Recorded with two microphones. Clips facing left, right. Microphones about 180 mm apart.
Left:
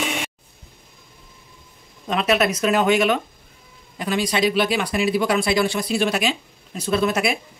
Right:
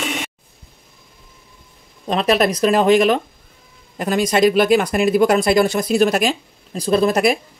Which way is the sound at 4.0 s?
45° right (ahead or behind).